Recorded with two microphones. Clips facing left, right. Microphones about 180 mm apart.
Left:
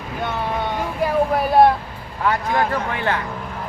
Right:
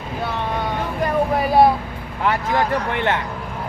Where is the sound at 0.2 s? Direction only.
Centre (ahead or behind).